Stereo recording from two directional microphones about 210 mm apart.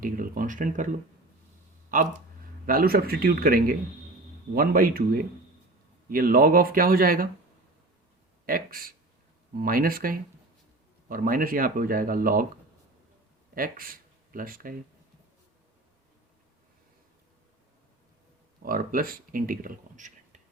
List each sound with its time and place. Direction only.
0.0 s speech: 40° right (ahead or behind)
2.6 s speech: 45° right (ahead or behind)
8.4 s speech: 45° right (ahead or behind)
13.5 s speech: 45° right (ahead or behind)
18.6 s speech: 45° right (ahead or behind)